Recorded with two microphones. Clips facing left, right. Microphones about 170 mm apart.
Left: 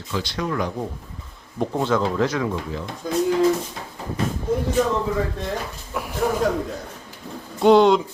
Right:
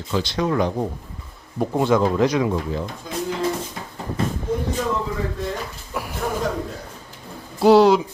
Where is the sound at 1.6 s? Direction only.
10° right (ahead or behind).